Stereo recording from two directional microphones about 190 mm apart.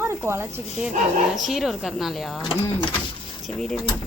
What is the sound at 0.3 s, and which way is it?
Speech, 15° right (ahead or behind).